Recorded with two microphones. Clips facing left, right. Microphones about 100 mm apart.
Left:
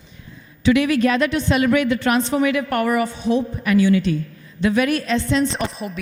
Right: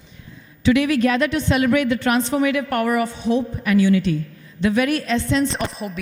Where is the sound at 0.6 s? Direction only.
20° left (ahead or behind).